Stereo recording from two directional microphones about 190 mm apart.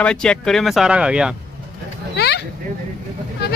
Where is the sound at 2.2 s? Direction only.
60° left (ahead or behind).